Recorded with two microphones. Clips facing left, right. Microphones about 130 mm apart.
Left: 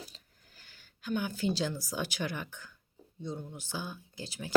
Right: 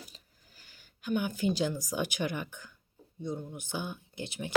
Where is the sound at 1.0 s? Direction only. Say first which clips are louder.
Right 2 dB; 15° right (ahead or behind).